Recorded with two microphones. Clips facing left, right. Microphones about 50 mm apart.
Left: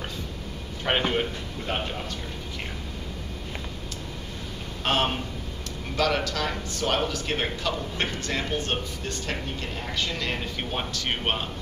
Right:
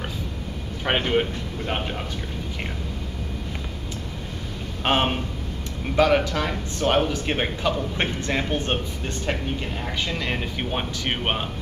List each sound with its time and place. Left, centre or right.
0.8 s speech: centre
4.8 s a man's voice: right